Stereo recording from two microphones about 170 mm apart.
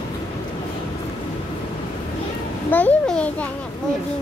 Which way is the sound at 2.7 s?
10° left (ahead or behind).